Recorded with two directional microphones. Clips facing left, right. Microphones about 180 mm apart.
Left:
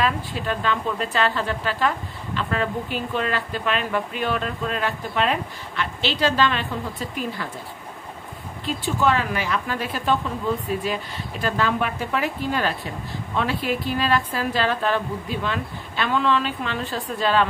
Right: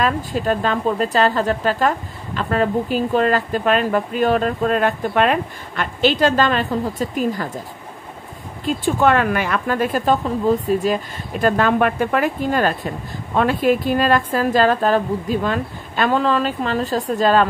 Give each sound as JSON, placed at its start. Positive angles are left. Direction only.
{"t": 0.0, "sound": "speech", "side_deg": -45}
{"t": 8.6, "sound": "speech", "side_deg": -55}